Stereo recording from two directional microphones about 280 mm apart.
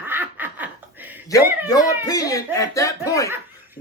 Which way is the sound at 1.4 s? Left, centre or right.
Centre.